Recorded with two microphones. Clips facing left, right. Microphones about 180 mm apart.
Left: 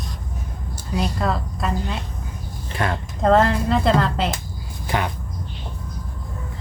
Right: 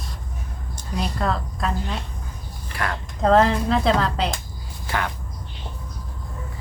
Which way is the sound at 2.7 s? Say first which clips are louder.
Left 4 dB; 25° left (ahead or behind).